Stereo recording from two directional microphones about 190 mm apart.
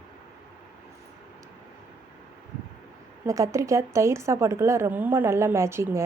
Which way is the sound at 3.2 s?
15° right (ahead or behind).